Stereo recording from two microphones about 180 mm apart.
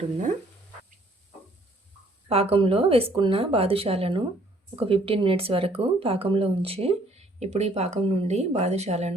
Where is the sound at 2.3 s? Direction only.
35° right (ahead or behind).